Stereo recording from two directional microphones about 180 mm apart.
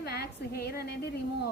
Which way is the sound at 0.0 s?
60° left (ahead or behind).